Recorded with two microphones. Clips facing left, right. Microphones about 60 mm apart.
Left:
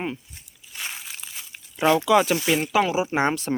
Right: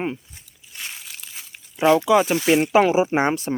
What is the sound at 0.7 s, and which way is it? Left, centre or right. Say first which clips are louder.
Crunch: left 1 dB; centre.